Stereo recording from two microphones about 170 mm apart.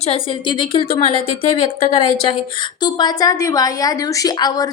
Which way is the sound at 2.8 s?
25° left (ahead or behind).